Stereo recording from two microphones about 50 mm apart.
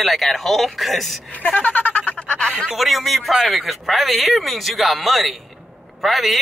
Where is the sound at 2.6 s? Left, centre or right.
Centre.